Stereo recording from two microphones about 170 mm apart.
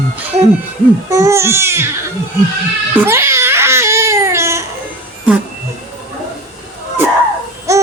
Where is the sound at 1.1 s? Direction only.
15° right (ahead or behind).